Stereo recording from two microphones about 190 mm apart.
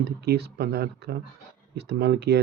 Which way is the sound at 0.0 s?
60° right (ahead or behind).